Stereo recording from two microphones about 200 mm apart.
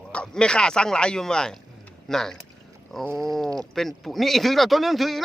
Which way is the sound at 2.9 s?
Centre (ahead or behind).